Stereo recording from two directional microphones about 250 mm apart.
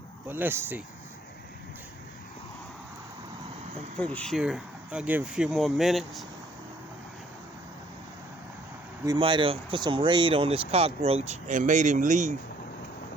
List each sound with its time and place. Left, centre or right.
0.3 s speech: centre
3.9 s speech: centre
9.0 s speech: centre